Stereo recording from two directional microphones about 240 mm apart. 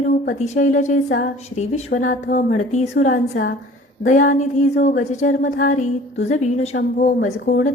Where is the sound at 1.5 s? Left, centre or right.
Left.